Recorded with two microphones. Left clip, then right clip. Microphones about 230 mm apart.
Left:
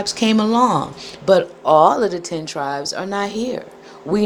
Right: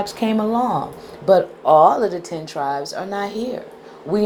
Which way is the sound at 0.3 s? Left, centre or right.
Left.